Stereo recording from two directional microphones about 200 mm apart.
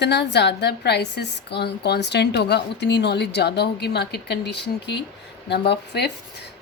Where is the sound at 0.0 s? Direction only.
60° left (ahead or behind).